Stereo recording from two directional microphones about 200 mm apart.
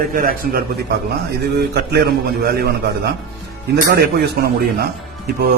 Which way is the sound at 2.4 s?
50° right (ahead or behind).